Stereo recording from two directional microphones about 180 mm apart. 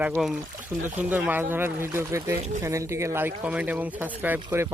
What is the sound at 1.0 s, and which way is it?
Speech, 10° right (ahead or behind).